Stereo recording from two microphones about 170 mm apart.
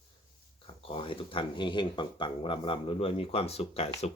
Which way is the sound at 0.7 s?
30° left (ahead or behind).